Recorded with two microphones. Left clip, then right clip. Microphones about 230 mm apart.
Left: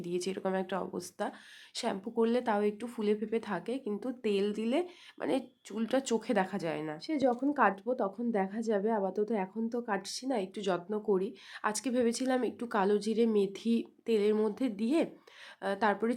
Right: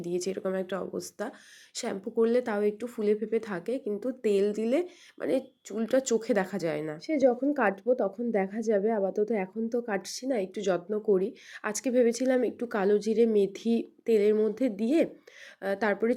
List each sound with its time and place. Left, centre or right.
0.0 s speech: centre